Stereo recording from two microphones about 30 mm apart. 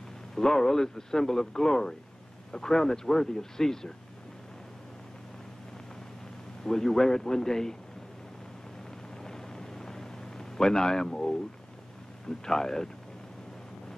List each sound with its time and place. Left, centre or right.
0.3 s a man's voice: centre
6.6 s a man's voice: centre
9.2 s a sound: centre
12.3 s a man's voice: centre